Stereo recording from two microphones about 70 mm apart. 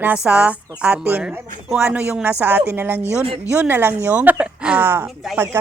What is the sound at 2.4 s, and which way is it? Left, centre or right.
Speech, right.